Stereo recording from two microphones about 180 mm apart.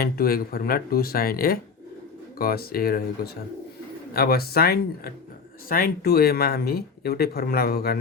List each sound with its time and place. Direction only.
0.0 s speech: 55° left (ahead or behind)